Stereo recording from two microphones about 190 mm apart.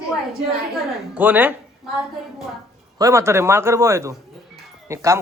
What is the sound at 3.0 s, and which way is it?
A woman's voice, 15° right (ahead or behind).